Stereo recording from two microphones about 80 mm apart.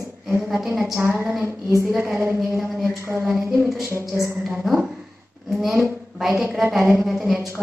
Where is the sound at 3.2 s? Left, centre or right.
Centre.